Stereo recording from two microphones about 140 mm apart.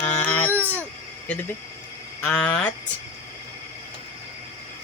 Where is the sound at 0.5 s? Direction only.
15° right (ahead or behind).